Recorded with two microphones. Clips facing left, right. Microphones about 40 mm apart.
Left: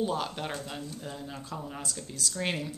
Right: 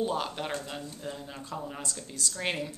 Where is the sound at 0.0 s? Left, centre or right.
Centre.